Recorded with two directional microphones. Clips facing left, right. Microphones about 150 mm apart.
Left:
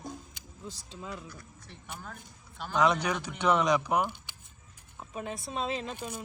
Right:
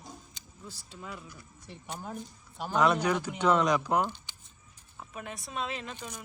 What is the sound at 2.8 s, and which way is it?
Speech, 15° left (ahead or behind).